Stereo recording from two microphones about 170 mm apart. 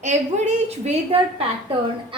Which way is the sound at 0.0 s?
40° right (ahead or behind).